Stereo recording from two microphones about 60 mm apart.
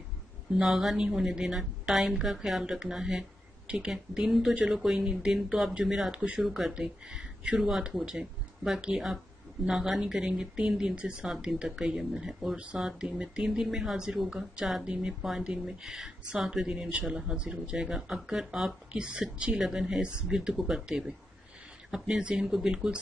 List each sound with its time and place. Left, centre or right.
0.6 s speech: centre
3.6 s speech: centre
6.1 s speech: centre
6.4 s speech: centre